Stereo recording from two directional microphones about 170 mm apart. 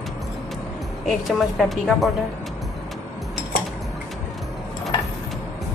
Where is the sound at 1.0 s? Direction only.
Centre (ahead or behind).